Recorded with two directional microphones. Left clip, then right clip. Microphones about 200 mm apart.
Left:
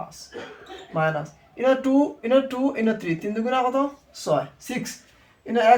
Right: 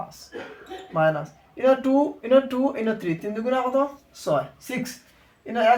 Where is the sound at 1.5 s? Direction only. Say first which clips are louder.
Right 1 dB; 10° right (ahead or behind).